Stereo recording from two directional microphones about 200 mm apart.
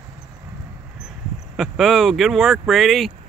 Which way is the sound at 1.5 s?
Centre (ahead or behind).